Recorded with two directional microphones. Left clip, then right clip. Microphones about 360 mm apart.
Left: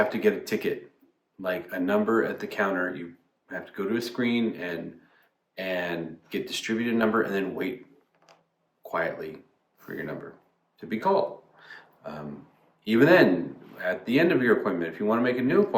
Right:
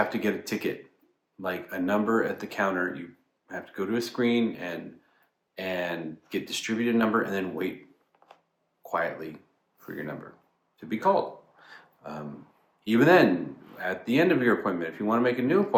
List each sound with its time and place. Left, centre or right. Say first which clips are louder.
0.1 s speech: left 4 dB; centre
8.8 s speech: even; centre
10.8 s a sound: even; centre
12.8 s speech: left 1 dB; centre